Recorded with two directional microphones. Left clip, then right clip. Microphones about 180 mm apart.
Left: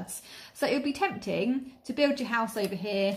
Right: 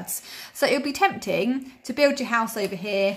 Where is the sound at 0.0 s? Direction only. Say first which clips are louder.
Right 7 dB; 20° right (ahead or behind).